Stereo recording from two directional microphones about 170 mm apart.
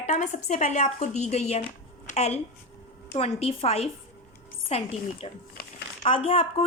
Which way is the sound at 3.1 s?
35° left (ahead or behind).